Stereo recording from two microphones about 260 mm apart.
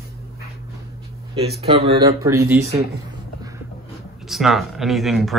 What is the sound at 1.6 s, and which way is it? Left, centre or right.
Speech, right.